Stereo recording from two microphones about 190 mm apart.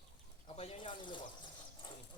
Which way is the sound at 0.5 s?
30° left (ahead or behind).